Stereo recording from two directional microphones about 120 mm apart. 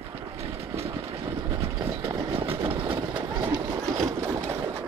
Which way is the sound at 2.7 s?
45° right (ahead or behind).